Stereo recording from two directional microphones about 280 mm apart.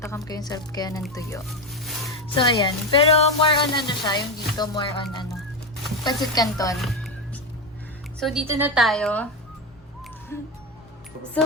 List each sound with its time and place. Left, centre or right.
0.1 s speech: centre
1.7 s a sound: centre
2.3 s speech: centre
6.3 s speech: centre
6.7 s speech: centre
8.2 s a woman's voice: centre
10.3 s speech: centre